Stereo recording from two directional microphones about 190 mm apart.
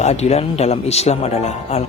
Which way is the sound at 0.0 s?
35° left (ahead or behind).